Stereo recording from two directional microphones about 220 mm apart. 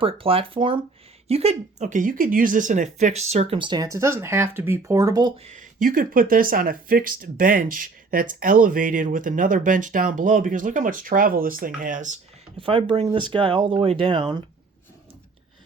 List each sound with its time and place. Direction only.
0.0 s speech: 25° right (ahead or behind)
5.5 s speech: 35° right (ahead or behind)
12.5 s speech: 25° right (ahead or behind)